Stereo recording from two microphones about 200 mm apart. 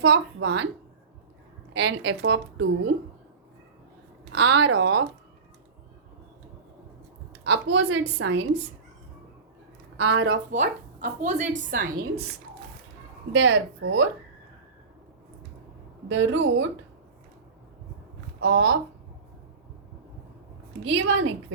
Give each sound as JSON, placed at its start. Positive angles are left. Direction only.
{"t": 0.0, "sound": "a woman's voice", "side_deg": -80}
{"t": 1.7, "sound": "a woman's voice", "side_deg": -65}
{"t": 4.3, "sound": "a woman's voice", "side_deg": -70}
{"t": 7.4, "sound": "a woman's voice", "side_deg": -75}
{"t": 10.0, "sound": "a woman's voice", "side_deg": -80}
{"t": 10.5, "sound": "a woman's voice", "side_deg": -40}
{"t": 13.3, "sound": "a woman's voice", "side_deg": -70}
{"t": 16.0, "sound": "a woman's voice", "side_deg": -70}
{"t": 18.3, "sound": "speech", "side_deg": -60}
{"t": 20.8, "sound": "a woman's voice", "side_deg": -75}